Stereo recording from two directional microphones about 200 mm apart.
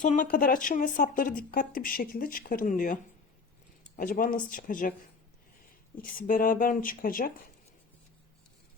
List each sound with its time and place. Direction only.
0.0 s speech: 40° left (ahead or behind)
6.0 s speech: 45° left (ahead or behind)